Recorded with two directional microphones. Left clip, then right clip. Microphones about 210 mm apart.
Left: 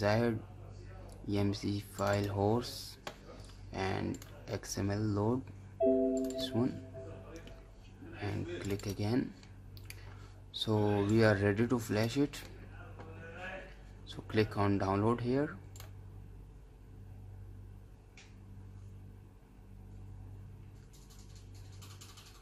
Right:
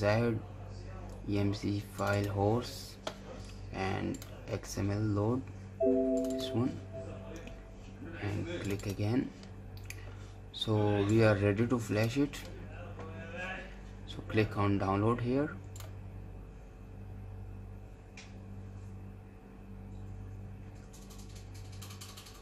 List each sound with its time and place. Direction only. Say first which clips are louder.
0.0 s speech: right 1 dB; 15° left (ahead or behind)
8.2 s speech: right 1 dB; 10° left (ahead or behind)
10.5 s speech: right 1 dB; 15° left (ahead or behind)
14.0 s speech: right 1 dB; 15° left (ahead or behind)